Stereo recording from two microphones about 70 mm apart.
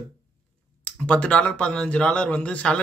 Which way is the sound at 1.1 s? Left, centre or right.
Centre.